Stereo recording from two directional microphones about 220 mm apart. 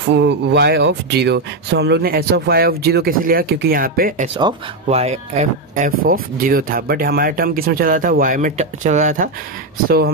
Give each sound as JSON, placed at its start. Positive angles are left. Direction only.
{"t": 0.1, "sound": "speech", "side_deg": -50}
{"t": 4.4, "sound": "speech", "side_deg": -25}
{"t": 9.8, "sound": "speech", "side_deg": -45}